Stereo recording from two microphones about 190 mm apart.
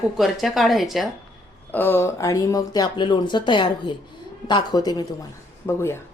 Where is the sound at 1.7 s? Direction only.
10° left (ahead or behind).